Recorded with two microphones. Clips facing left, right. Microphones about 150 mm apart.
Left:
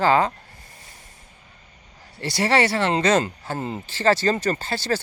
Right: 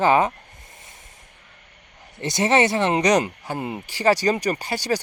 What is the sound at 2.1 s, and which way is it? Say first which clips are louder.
Speech: right 1 dB; 20° right (ahead or behind).